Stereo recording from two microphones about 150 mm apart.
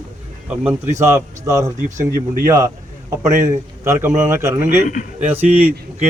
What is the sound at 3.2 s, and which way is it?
A man's voice, 20° right (ahead or behind).